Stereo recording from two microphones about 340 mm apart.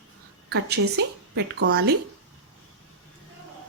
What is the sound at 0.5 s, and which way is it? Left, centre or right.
A woman's voice, right.